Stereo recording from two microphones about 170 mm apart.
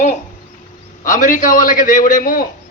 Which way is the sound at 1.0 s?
50° left (ahead or behind).